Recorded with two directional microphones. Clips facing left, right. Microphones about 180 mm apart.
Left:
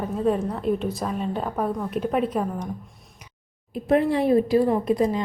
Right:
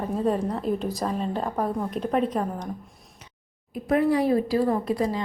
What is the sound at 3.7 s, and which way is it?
A woman's voice, 25° left (ahead or behind).